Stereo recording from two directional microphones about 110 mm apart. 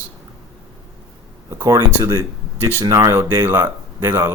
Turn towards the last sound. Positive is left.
turn(degrees=-20)  # may be behind; listen again after turning